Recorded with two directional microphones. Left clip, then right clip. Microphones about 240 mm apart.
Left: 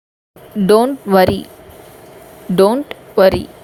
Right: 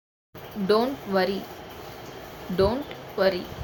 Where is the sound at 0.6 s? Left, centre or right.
Left.